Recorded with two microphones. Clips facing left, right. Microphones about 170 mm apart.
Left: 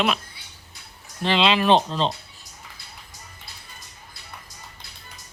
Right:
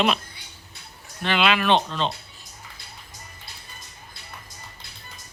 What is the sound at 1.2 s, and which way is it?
Speech, 30° left (ahead or behind).